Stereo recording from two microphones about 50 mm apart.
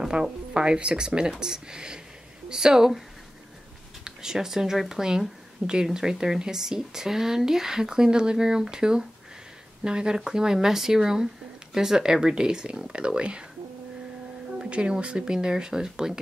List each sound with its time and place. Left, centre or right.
0.0 s speech: centre
4.0 s speech: centre
14.6 s speech: centre